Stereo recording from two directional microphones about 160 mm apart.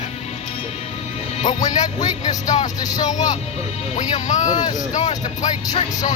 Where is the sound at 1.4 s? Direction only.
50° left (ahead or behind).